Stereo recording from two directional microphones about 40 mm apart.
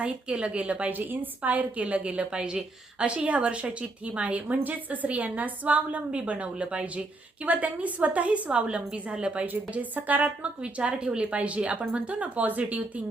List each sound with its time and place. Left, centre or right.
0.0 s a woman's voice: right
3.2 s a woman's voice: right
7.4 s a woman's voice: right
9.5 s a woman's voice: right